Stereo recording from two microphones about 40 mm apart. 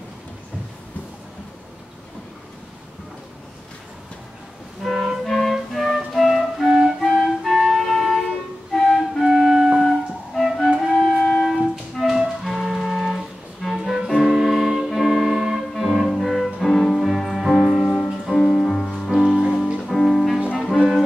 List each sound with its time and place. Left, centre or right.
4.8 s music: centre
8.9 s flute: centre
9.8 s music: centre
13.9 s clarinet: centre
15.8 s music: centre
17.7 s music: left
18.2 s music: centre